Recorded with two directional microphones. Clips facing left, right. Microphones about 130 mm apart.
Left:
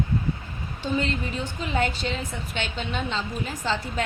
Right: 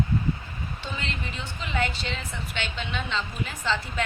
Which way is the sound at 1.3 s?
40° left (ahead or behind).